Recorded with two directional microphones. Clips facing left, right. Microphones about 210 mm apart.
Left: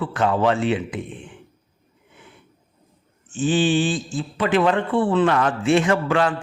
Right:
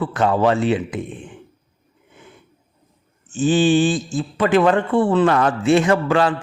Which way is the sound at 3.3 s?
40° right (ahead or behind).